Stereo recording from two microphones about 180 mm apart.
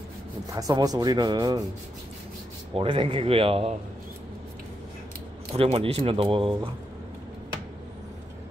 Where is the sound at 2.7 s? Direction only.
30° right (ahead or behind).